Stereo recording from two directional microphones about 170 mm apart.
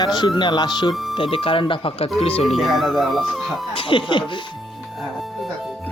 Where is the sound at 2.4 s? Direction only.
Centre (ahead or behind).